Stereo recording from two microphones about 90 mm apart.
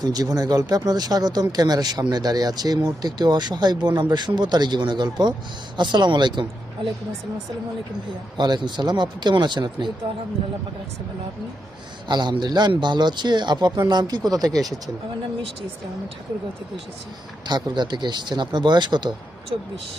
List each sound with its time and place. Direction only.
0.0 s speech: 45° right (ahead or behind)
8.4 s speech: 55° right (ahead or behind)
12.0 s speech: 55° right (ahead or behind)
17.4 s speech: 55° right (ahead or behind)